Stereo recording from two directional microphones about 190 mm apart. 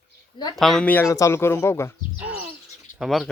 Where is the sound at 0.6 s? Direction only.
Centre (ahead or behind).